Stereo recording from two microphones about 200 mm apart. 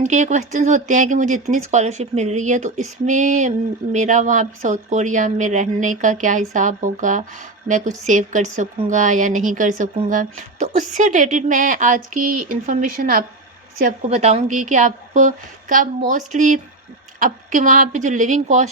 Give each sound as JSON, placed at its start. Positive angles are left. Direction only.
{"t": 0.0, "sound": "speech", "side_deg": -35}
{"t": 14.1, "sound": "speech", "side_deg": -30}